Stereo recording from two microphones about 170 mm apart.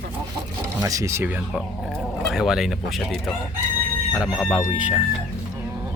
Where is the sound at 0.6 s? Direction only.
20° right (ahead or behind).